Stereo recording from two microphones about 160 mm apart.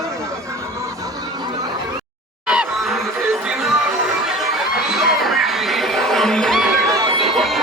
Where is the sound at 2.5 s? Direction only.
5° right (ahead or behind).